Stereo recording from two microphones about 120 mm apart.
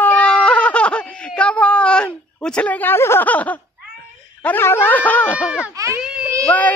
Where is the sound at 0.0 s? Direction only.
10° left (ahead or behind).